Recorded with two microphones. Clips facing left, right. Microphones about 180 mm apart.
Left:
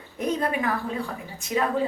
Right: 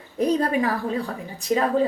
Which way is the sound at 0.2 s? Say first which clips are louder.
Right 5 dB; 35° right (ahead or behind).